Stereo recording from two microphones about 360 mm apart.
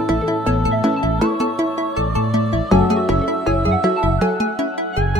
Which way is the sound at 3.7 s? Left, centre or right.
Centre.